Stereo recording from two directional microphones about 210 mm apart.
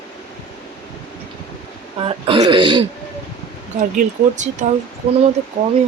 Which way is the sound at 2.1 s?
25° right (ahead or behind).